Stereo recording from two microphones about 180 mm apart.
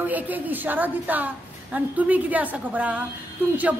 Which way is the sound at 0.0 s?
10° right (ahead or behind).